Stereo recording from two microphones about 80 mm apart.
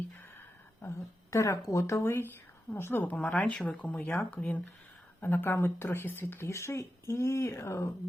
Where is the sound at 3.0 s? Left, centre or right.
Centre.